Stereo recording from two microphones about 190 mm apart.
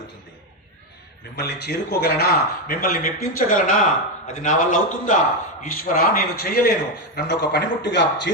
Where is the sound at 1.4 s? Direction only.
60° left (ahead or behind).